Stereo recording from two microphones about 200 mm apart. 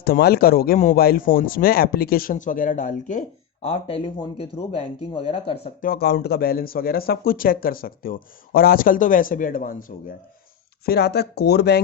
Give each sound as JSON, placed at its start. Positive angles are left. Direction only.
{"t": 0.0, "sound": "speech", "side_deg": 50}
{"t": 5.8, "sound": "speech", "side_deg": 50}
{"t": 10.8, "sound": "speech", "side_deg": 55}